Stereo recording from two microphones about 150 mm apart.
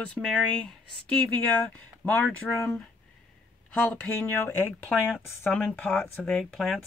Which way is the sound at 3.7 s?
10° left (ahead or behind).